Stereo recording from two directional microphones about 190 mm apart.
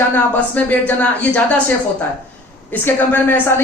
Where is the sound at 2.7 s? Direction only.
10° left (ahead or behind).